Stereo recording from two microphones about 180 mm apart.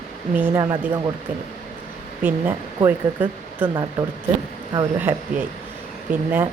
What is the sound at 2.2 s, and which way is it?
Speech, 10° right (ahead or behind).